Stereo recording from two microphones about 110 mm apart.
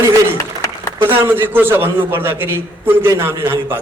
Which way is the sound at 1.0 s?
20° right (ahead or behind).